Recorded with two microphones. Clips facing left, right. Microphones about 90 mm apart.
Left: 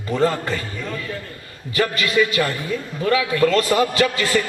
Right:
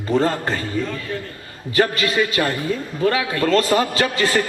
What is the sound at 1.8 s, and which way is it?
A woman's voice, 35° right (ahead or behind).